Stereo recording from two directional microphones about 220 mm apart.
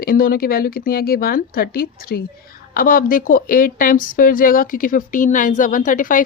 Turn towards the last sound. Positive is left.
turn(degrees=40)  # may be behind; listen again after turning